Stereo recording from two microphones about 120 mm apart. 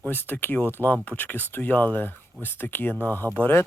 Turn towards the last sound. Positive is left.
turn(degrees=15)  # may be behind; listen again after turning